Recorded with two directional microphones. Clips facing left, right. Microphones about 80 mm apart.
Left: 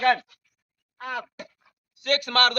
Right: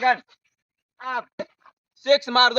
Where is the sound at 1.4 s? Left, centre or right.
Right.